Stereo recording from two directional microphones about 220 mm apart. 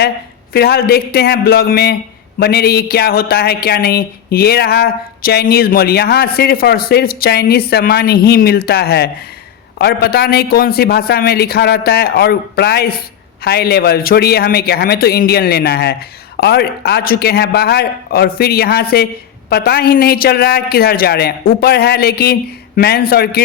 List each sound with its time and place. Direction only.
0.5 s speech: 45° left (ahead or behind)